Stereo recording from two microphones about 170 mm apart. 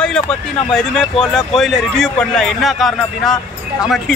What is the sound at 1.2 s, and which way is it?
A man's voice, centre (ahead or behind).